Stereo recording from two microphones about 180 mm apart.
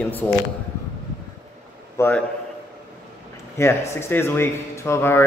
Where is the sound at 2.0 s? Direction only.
10° left (ahead or behind).